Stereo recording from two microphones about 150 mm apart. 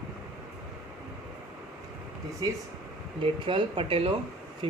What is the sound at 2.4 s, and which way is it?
Speech, 25° right (ahead or behind).